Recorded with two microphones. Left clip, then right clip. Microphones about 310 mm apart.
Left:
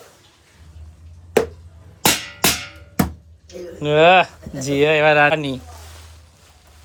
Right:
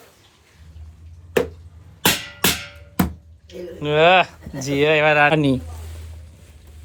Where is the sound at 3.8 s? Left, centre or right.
Centre.